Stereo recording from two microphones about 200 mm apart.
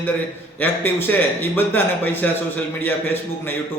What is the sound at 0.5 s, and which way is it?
A man's voice, 10° left (ahead or behind).